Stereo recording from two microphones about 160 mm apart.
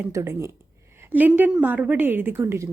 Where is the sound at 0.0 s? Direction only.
20° right (ahead or behind).